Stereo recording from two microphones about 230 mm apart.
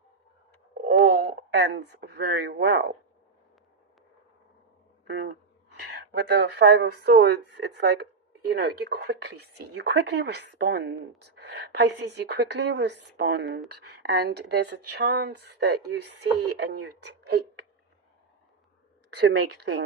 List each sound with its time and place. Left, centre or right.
0.7 s speech: right
5.0 s a woman's voice: right
19.2 s a woman's voice: right